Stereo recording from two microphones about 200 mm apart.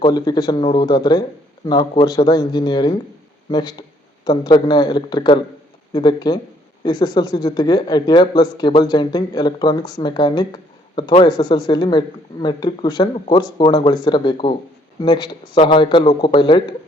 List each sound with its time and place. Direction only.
0.0 s a woman's voice: 20° left (ahead or behind)